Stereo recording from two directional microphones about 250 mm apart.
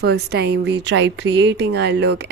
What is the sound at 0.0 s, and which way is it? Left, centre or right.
Speech, right.